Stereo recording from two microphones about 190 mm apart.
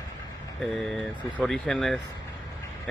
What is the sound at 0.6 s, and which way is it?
Speech, centre (ahead or behind).